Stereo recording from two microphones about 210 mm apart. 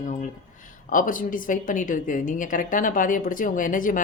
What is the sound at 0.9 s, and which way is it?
A woman's voice, 40° left (ahead or behind).